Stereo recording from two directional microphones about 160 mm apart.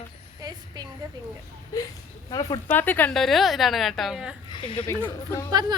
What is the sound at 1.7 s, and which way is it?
Speech, 20° left (ahead or behind).